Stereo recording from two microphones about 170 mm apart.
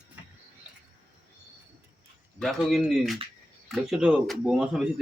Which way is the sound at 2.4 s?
Centre (ahead or behind).